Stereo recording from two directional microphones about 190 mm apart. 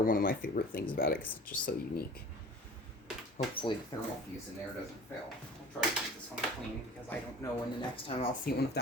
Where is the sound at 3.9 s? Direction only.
20° left (ahead or behind).